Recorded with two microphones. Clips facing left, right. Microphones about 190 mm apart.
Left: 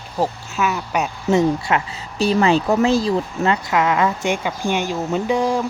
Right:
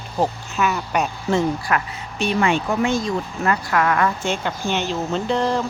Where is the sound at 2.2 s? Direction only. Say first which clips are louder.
Left 4 dB; 35° left (ahead or behind); by 5.6 s 10° left (ahead or behind).